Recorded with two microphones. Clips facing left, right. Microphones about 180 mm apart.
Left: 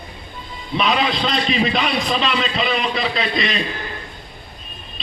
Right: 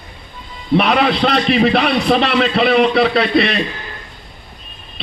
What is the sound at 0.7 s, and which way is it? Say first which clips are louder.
A man's voice: right 6 dB; 65° right (ahead or behind).